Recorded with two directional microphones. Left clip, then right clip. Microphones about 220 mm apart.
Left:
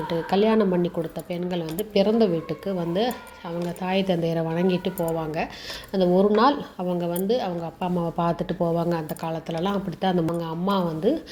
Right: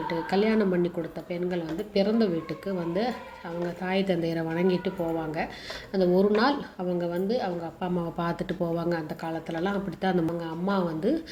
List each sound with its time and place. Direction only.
0.1 s a woman's voice: 25° left (ahead or behind)
1.3 s a woman's voice: 35° left (ahead or behind)
5.9 s a woman's voice: 25° left (ahead or behind)
8.2 s a woman's voice: 20° left (ahead or behind)